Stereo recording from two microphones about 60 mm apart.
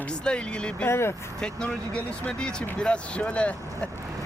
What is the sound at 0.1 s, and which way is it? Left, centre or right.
Speech, centre.